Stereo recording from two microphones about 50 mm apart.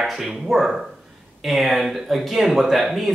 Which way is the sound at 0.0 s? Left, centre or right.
Centre.